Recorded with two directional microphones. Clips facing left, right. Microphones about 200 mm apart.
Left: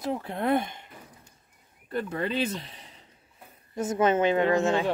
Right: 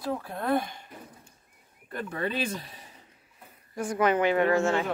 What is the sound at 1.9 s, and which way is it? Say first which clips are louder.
A woman's voice: left 2 dB; 25° left (ahead or behind).